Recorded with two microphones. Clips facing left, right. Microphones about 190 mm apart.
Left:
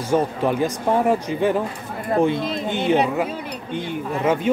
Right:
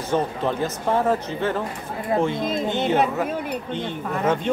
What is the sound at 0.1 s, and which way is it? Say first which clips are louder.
Speech: left 3 dB; 10° left (ahead or behind).